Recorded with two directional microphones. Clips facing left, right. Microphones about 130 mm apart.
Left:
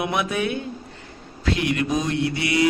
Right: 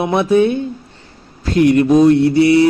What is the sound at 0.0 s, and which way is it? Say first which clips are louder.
Mantra: right 11 dB; 30° right (ahead or behind).